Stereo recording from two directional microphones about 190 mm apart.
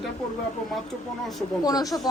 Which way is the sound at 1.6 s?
20° left (ahead or behind).